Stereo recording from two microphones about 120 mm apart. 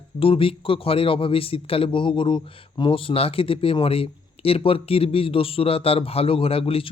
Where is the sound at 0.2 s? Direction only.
50° left (ahead or behind).